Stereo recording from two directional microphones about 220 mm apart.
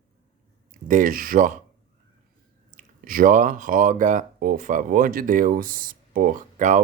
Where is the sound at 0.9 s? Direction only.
40° right (ahead or behind).